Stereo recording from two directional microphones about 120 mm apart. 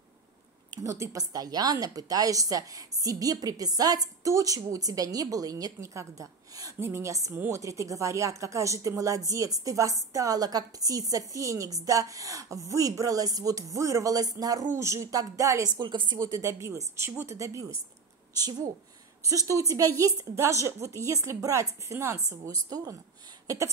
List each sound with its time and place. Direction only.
0.7 s a woman's voice: 25° right (ahead or behind)
15.7 s speech: 40° right (ahead or behind)
16.2 s a woman's voice: 25° right (ahead or behind)
23.4 s a sound: 30° right (ahead or behind)